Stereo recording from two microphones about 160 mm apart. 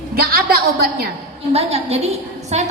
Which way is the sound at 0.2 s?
70° right (ahead or behind).